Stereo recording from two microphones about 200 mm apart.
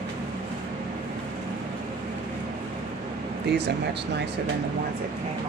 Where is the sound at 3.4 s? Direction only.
55° right (ahead or behind).